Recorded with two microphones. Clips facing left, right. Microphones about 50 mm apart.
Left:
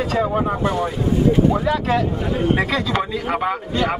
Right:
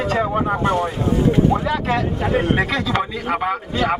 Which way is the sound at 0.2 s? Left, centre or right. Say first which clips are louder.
Even; centre.